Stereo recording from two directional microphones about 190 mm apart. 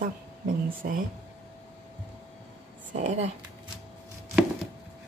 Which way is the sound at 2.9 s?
35° right (ahead or behind).